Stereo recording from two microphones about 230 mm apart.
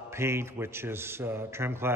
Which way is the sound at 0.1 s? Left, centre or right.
Centre.